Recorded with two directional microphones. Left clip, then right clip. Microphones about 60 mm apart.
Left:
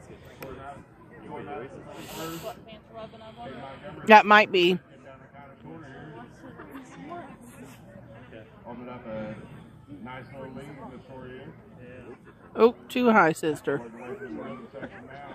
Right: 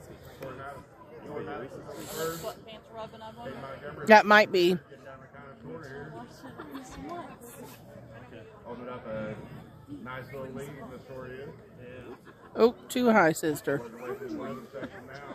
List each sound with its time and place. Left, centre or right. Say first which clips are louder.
2.0 s a man's voice: right 3 dB; centre
2.7 s speech: right 1 dB; right
4.0 s a man's voice: left 3 dB; centre
9.1 s a woman's voice: left 1 dB; centre
12.5 s a woman's voice: left 3 dB; centre
13.7 s speech: even; centre
14.7 s speech: even; right